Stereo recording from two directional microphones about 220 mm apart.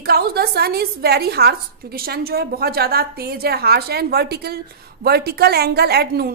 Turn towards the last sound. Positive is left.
turn(degrees=-45)  # may be behind; listen again after turning